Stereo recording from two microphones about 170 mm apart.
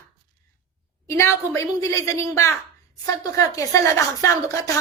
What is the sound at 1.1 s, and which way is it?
A woman's voice, 15° left (ahead or behind).